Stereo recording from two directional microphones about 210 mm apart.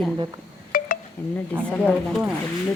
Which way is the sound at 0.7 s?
40° left (ahead or behind).